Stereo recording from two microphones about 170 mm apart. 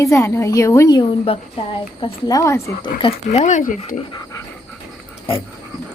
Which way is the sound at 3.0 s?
40° left (ahead or behind).